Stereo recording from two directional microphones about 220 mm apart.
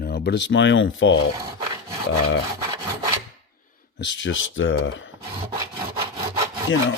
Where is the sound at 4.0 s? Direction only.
60° left (ahead or behind).